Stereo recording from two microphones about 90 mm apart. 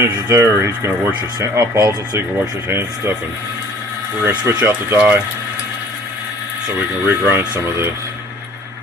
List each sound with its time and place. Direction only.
0.0 s speech: 30° right (ahead or behind)
4.2 s speech: 25° right (ahead or behind)
4.9 s speech: 15° right (ahead or behind)
7.1 s speech: 25° right (ahead or behind)